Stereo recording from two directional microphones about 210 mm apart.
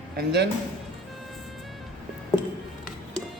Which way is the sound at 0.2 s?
55° right (ahead or behind).